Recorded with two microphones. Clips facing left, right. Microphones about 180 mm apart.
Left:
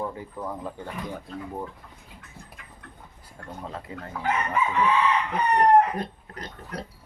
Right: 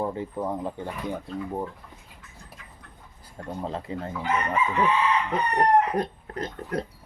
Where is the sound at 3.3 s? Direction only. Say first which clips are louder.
Right 5 dB; 30° right (ahead or behind).